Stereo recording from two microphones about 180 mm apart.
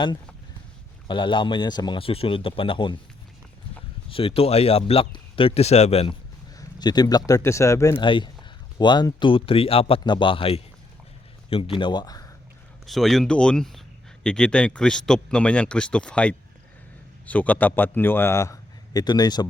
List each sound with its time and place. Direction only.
1.0 s a man's voice: 25° left (ahead or behind)
4.1 s speech: 30° left (ahead or behind)
6.6 s a man's voice: 20° left (ahead or behind)
8.0 s a man's voice: 25° left (ahead or behind)
12.8 s a man's voice: centre (ahead or behind); by 19.5 s 20° left (ahead or behind)